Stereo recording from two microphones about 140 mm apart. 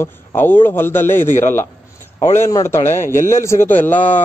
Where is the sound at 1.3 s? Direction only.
60° left (ahead or behind).